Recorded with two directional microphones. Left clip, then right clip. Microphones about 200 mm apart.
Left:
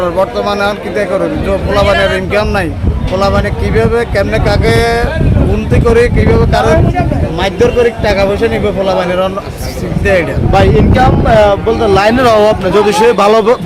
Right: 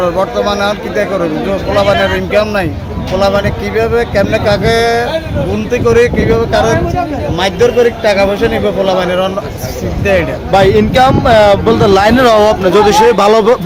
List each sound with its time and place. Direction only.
0.0 s a man's voice: 5° left (ahead or behind)
10.5 s speech: 10° right (ahead or behind)